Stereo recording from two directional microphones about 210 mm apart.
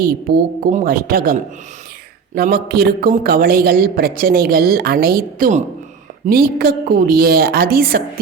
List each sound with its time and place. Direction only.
0.0 s a man's voice: 45° right (ahead or behind)